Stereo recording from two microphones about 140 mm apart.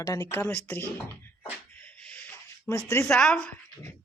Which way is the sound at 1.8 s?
10° left (ahead or behind).